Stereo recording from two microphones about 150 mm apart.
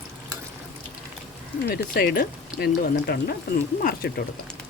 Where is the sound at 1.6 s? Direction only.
90° left.